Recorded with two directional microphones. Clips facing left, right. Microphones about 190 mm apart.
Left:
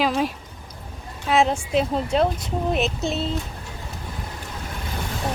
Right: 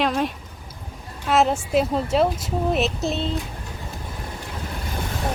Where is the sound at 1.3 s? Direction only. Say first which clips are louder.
Right 1 dB; centre (ahead or behind).